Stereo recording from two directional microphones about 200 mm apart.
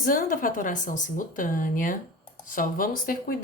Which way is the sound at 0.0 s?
45° left (ahead or behind).